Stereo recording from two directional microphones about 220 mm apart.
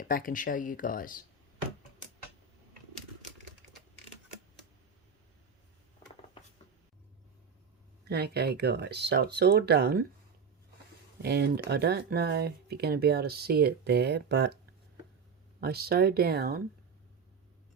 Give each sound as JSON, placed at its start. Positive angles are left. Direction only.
{"t": 0.0, "sound": "speech", "side_deg": 40}
{"t": 8.0, "sound": "speech", "side_deg": -45}
{"t": 11.2, "sound": "speech", "side_deg": -50}
{"t": 15.6, "sound": "speech", "side_deg": -45}